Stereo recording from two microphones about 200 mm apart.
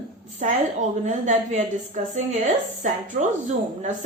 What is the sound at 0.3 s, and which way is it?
Speech, 35° right (ahead or behind).